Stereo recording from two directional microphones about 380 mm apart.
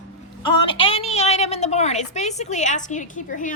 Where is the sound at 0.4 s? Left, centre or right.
Centre.